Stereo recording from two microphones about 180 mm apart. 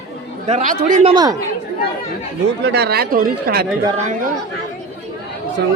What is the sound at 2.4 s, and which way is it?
Speech, 65° right (ahead or behind).